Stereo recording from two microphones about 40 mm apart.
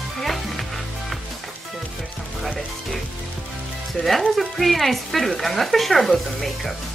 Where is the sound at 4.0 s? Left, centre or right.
Centre.